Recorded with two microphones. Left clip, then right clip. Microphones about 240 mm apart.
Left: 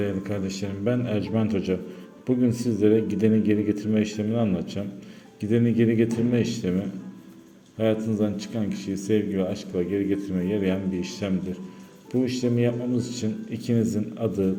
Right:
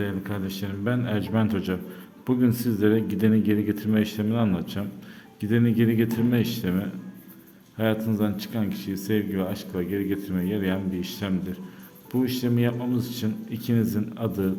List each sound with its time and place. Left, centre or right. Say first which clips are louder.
0.0 s speech: left 3 dB; centre